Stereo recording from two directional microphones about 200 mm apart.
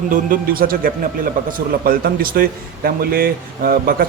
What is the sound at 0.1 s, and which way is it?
A man's voice, 45° right (ahead or behind).